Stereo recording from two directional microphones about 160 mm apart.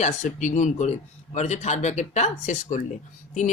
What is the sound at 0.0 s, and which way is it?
Speech, 50° left (ahead or behind).